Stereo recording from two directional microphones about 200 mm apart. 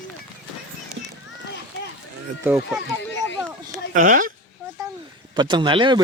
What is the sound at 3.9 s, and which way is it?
Speech, 40° right (ahead or behind).